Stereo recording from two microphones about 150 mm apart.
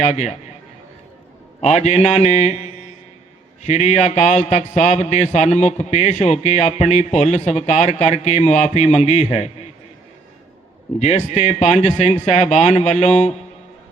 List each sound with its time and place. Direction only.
0.0 s a man's voice: 50° left (ahead or behind)
1.6 s a man's voice: 50° left (ahead or behind)
11.3 s a man's voice: 50° left (ahead or behind)